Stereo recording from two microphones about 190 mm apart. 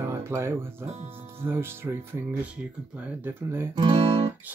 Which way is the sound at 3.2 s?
10° right (ahead or behind).